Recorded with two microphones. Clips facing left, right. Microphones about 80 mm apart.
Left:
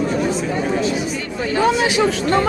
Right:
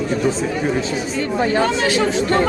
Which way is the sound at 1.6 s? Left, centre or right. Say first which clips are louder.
Left 1 dB; centre.